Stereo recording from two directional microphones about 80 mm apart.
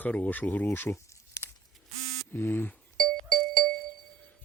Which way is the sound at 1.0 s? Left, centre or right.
Left.